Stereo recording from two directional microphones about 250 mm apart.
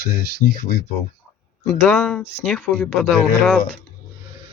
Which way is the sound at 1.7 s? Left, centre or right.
Centre.